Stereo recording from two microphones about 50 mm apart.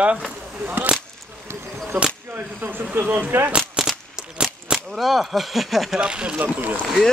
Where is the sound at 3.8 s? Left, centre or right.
Centre.